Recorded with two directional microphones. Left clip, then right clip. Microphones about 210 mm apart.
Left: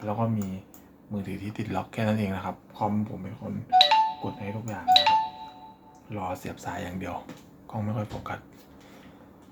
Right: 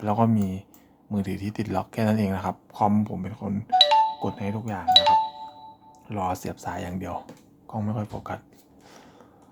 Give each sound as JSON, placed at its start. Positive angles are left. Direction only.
{"t": 0.0, "sound": "speech", "side_deg": -55}
{"t": 2.7, "sound": "speech", "side_deg": -55}
{"t": 3.7, "sound": "speech", "side_deg": -20}
{"t": 4.2, "sound": "speech", "side_deg": -50}
{"t": 4.9, "sound": "speech", "side_deg": -25}
{"t": 6.1, "sound": "speech", "side_deg": -55}
{"t": 6.4, "sound": "speech", "side_deg": -40}